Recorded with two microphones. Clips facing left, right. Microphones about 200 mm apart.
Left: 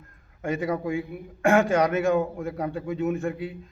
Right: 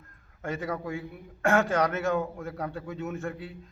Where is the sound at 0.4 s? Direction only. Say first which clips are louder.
Left 6 dB; 15° left (ahead or behind).